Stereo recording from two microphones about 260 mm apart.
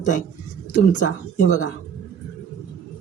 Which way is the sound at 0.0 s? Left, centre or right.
Left.